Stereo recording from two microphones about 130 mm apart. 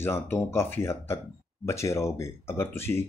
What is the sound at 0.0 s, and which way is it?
Speech, 20° left (ahead or behind).